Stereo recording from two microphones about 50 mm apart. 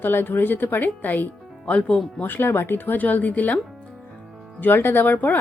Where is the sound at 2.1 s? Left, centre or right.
Left.